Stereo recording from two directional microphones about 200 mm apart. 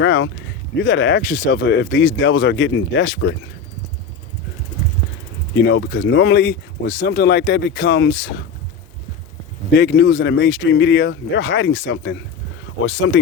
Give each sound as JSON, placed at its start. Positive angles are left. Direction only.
{"t": 0.0, "sound": "speech", "side_deg": 70}
{"t": 5.5, "sound": "speech", "side_deg": 60}
{"t": 9.7, "sound": "speech", "side_deg": 60}
{"t": 12.8, "sound": "speech", "side_deg": 80}